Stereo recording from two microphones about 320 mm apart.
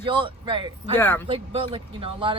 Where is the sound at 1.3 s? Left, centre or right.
Centre.